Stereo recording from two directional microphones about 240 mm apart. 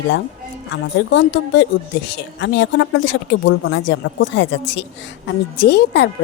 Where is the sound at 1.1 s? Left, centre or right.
Left.